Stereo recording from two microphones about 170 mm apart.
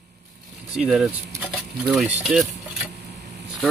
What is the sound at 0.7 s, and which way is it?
Speech, 5° right (ahead or behind).